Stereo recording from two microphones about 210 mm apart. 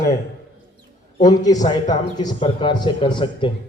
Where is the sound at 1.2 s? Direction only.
15° left (ahead or behind).